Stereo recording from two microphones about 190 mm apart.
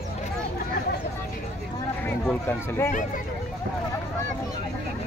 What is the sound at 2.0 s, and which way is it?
Speech, 10° left (ahead or behind).